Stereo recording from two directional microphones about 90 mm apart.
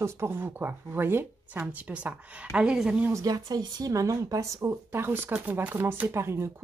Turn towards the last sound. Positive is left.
turn(degrees=-30)  # may be behind; listen again after turning